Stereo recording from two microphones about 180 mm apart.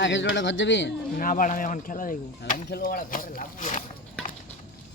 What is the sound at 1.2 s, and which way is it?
Speech, 50° left (ahead or behind).